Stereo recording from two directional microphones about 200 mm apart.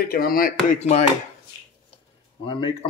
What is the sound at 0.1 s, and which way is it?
Speech, 45° left (ahead or behind).